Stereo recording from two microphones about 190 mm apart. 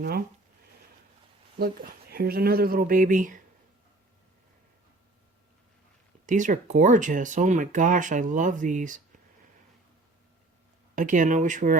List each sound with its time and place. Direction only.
1.5 s speech: 55° right (ahead or behind)
6.2 s speech: 40° right (ahead or behind)
10.9 s speech: 45° right (ahead or behind)